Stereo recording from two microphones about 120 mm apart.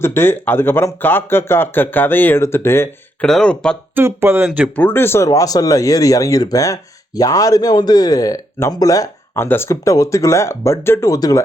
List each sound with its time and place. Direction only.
0.0 s speech: 20° left (ahead or behind)
3.2 s speech: 5° left (ahead or behind)
3.9 s speech: 20° right (ahead or behind)
4.4 s speech: 10° right (ahead or behind)
4.8 s speech: 20° left (ahead or behind)